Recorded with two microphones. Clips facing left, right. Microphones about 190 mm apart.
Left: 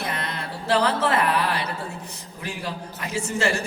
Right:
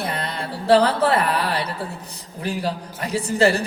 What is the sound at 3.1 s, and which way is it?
Speech, 35° right (ahead or behind).